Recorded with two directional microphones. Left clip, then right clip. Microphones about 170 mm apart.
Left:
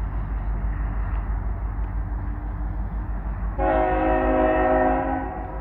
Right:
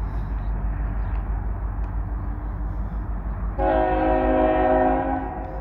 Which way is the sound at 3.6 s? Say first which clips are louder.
Even; 20° right (ahead or behind).